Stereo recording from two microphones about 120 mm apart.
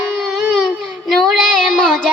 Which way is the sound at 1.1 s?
Centre (ahead or behind).